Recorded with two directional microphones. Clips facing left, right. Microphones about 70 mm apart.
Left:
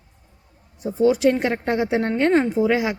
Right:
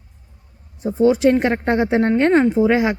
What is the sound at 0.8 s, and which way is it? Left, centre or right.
Speech, right.